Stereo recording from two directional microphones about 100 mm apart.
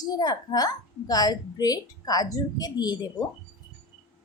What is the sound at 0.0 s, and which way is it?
A woman's voice, 45° left (ahead or behind).